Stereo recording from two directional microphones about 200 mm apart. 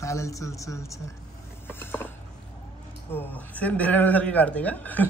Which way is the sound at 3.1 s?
10° left (ahead or behind).